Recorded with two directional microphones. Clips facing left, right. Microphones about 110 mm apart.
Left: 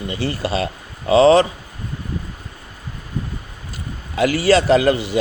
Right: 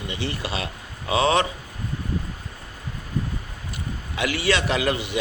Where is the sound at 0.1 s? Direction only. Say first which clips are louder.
Left 7 dB; 40° left (ahead or behind).